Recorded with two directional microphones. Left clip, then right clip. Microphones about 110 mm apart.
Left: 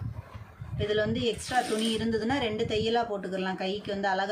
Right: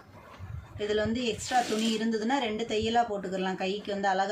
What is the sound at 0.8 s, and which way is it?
Speech, 5° left (ahead or behind).